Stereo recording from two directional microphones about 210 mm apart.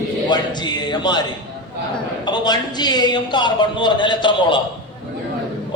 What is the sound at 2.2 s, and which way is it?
A man's voice, 20° left (ahead or behind).